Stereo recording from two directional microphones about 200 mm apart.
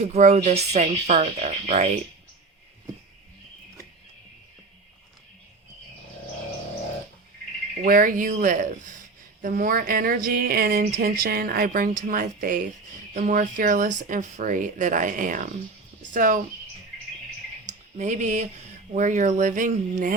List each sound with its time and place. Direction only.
0.0 s speech: 35° right (ahead or behind)
7.9 s a woman's voice: 45° right (ahead or behind)
17.7 s speech: 35° right (ahead or behind)